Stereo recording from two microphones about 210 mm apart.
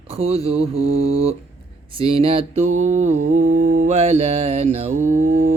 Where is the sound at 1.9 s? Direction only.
25° right (ahead or behind).